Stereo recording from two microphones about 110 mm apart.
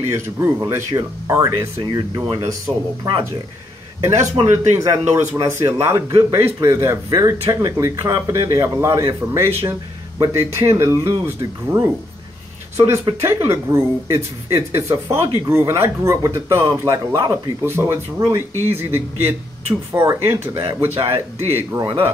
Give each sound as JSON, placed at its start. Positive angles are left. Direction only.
{"t": 0.1, "sound": "speech", "side_deg": -25}
{"t": 1.8, "sound": "speech", "side_deg": -40}
{"t": 4.0, "sound": "speech", "side_deg": -25}